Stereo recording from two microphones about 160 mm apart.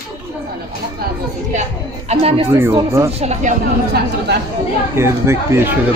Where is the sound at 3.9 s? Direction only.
90° right.